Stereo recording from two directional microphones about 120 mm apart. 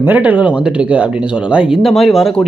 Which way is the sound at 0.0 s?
15° right (ahead or behind).